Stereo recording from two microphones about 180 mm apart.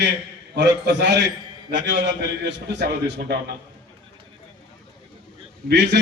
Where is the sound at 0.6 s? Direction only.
70° right (ahead or behind).